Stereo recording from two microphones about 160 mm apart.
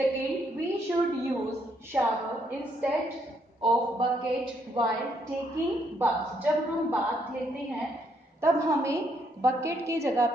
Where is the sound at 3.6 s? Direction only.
30° right (ahead or behind).